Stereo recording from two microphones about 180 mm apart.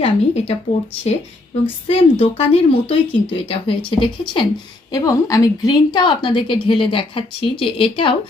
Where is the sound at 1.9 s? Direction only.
30° left (ahead or behind).